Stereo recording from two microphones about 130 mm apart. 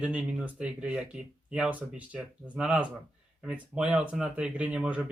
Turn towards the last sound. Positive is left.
turn(degrees=-10)  # may be behind; listen again after turning